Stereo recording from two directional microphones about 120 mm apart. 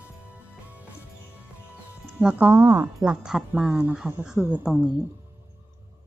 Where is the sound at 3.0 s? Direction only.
5° right (ahead or behind).